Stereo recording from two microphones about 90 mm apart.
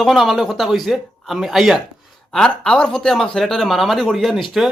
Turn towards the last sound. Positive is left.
turn(degrees=0)  # may be behind; listen again after turning